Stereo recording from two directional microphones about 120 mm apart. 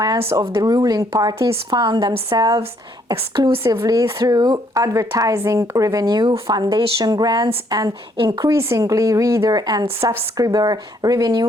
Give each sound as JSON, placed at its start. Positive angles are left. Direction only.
{"t": 0.5, "sound": "speech", "side_deg": -30}
{"t": 3.5, "sound": "speech", "side_deg": -20}
{"t": 8.4, "sound": "speech", "side_deg": -25}
{"t": 10.0, "sound": "speech", "side_deg": -20}